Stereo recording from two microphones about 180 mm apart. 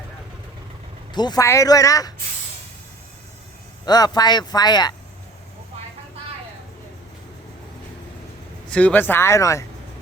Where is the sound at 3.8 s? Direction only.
20° left (ahead or behind).